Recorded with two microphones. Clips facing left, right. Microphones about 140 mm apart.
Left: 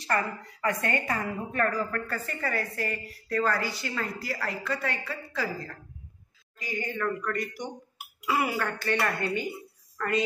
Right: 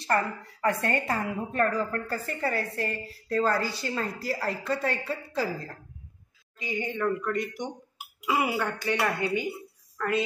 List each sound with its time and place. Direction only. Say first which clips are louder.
0.0 s a woman's voice: right 2 dB; 30° right (ahead or behind)
6.6 s a woman's voice: right 2 dB; 20° right (ahead or behind); by 10.2 s 5° right (ahead or behind)